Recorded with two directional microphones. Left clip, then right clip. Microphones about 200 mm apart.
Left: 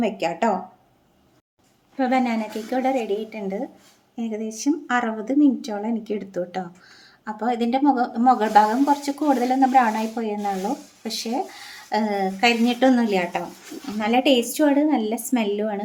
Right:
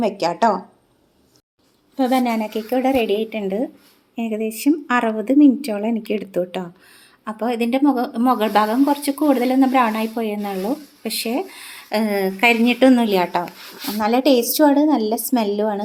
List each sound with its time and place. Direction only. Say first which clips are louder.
0.0 s a woman's voice: right 5 dB; 20° right (ahead or behind)
2.0 s a woman's voice: right 3 dB; 15° right (ahead or behind)
3.0 s a woman's voice: right 6 dB; 20° left (ahead or behind)
3.3 s a woman's voice: right 6 dB; 20° right (ahead or behind)